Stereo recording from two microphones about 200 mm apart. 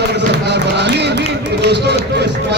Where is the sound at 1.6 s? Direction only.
55° right (ahead or behind).